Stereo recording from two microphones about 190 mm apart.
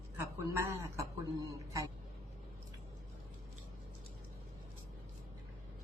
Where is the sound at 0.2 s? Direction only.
15° right (ahead or behind).